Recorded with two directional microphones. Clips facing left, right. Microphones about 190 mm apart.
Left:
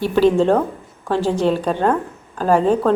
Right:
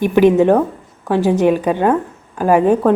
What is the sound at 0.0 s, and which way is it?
A woman's voice, 15° right (ahead or behind).